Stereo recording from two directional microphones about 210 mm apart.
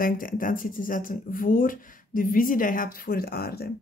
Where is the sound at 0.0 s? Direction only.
40° left (ahead or behind).